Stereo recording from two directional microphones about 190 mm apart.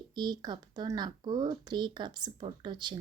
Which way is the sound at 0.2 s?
20° right (ahead or behind).